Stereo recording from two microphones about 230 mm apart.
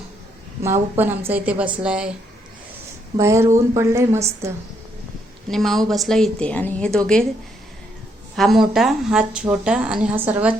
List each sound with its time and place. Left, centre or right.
0.6 s speech: centre
3.2 s speech: centre
5.5 s speech: centre
8.4 s speech: centre